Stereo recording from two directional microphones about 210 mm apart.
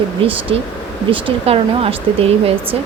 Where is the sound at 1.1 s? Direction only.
25° right (ahead or behind).